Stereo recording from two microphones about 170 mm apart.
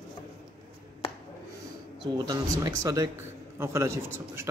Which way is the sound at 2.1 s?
25° right (ahead or behind).